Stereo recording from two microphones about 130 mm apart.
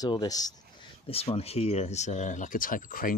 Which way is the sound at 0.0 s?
30° left (ahead or behind).